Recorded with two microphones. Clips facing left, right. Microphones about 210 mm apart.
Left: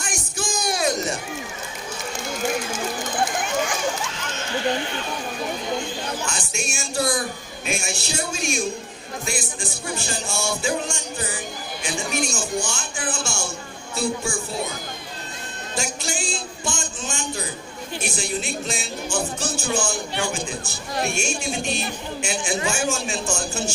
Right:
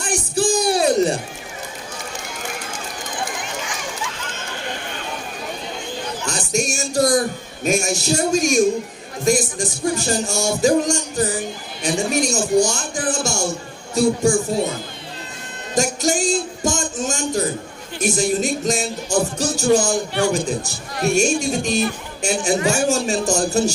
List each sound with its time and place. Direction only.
0.0 s music: 35° right (ahead or behind)
6.2 s music: 40° right (ahead or behind)
13.9 s speech: 45° right (ahead or behind)
15.7 s speech: 45° right (ahead or behind)
18.0 s music: 40° right (ahead or behind)